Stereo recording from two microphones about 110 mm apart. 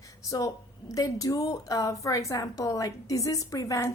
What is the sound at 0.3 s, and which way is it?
A woman's voice, 30° left (ahead or behind).